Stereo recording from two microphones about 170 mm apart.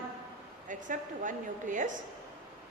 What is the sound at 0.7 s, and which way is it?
A woman's voice, 50° right (ahead or behind).